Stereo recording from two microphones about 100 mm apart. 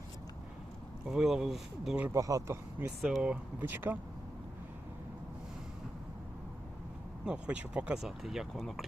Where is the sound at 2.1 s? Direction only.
35° right (ahead or behind).